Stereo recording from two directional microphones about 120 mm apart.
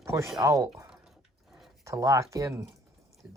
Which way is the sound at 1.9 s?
25° right (ahead or behind).